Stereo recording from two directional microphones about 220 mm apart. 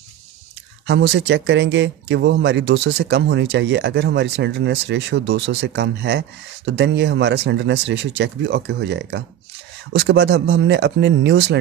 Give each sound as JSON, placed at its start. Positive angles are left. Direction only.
{"t": 0.8, "sound": "speech", "side_deg": -55}